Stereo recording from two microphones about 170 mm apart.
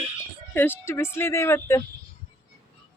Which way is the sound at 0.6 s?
15° left (ahead or behind).